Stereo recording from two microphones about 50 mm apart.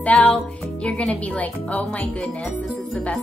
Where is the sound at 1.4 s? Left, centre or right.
Left.